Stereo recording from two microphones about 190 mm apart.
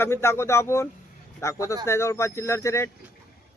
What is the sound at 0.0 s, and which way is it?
Speech, 15° left (ahead or behind).